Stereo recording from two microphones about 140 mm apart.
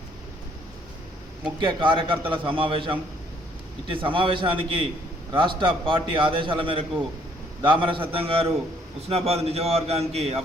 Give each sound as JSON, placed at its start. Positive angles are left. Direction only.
{"t": 1.5, "sound": "a man's voice", "side_deg": -35}